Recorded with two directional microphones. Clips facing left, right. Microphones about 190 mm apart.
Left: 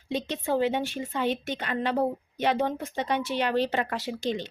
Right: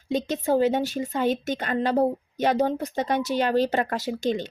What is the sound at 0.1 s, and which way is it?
A woman's voice, 45° right (ahead or behind).